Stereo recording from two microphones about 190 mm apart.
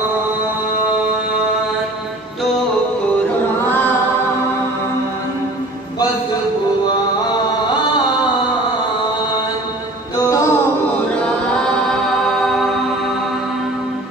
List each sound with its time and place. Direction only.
10.1 s music: 15° left (ahead or behind)
11.2 s chant: 5° left (ahead or behind)